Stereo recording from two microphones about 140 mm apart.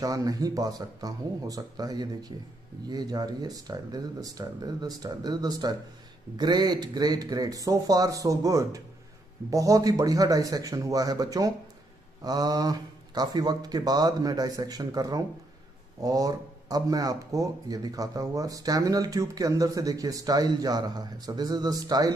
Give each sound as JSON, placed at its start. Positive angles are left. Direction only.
{"t": 0.0, "sound": "speech", "side_deg": -25}